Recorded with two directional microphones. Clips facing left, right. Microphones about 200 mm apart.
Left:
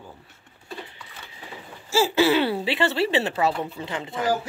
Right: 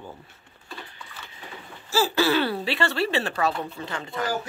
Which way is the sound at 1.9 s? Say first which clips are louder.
Left 3 dB; 25° left (ahead or behind).